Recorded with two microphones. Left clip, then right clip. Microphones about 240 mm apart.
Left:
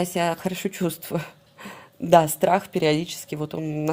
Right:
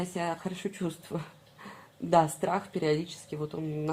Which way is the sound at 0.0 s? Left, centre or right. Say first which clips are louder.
Left 9 dB; left.